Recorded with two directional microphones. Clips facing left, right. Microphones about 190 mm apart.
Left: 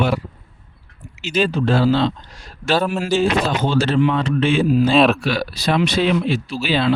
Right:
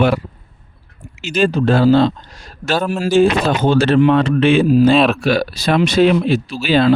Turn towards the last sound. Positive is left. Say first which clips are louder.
# right 5 dB
turn(degrees=-45)  # may be behind; listen again after turning